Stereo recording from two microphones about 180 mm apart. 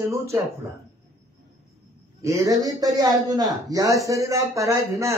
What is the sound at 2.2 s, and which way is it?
A man's voice, 15° right (ahead or behind).